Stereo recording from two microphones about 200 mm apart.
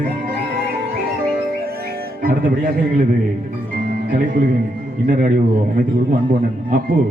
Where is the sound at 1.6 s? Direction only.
50° right (ahead or behind).